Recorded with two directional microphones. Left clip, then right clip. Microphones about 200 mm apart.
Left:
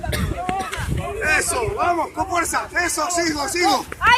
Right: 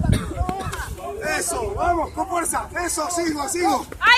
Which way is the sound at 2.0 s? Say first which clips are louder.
Left 2 dB; 5° right (ahead or behind).